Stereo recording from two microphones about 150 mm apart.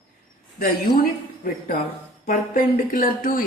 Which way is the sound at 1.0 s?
75° left (ahead or behind).